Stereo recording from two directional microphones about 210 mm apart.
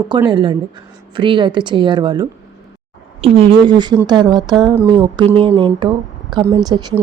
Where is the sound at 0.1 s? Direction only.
20° right (ahead or behind).